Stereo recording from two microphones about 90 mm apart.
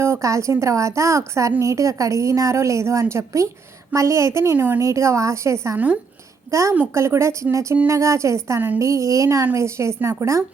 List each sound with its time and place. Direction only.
0.0 s a woman's voice: 30° right (ahead or behind)
4.5 s a woman's voice: 20° right (ahead or behind)
4.8 s a woman's voice: 35° right (ahead or behind)
5.7 s a woman's voice: 20° right (ahead or behind)
6.5 s a woman's voice: 35° right (ahead or behind)